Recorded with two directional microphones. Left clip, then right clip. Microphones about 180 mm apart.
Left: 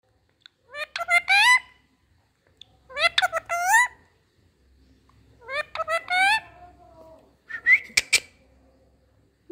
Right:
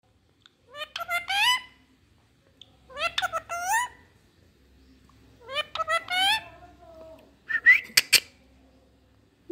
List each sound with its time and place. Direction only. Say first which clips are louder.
0.4 s fowl: left 4 dB; 15° left (ahead or behind)
2.6 s a sound: left 7 dB; 15° left (ahead or behind)
5.5 s fowl: left 1 dB; 10° left (ahead or behind)
7.4 s whistling: right 1 dB; centre (ahead or behind)